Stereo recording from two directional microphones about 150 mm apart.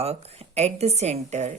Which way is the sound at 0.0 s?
45° right (ahead or behind).